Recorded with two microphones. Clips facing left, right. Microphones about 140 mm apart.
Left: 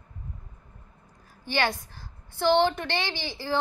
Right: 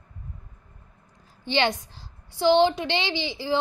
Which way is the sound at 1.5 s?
20° right (ahead or behind).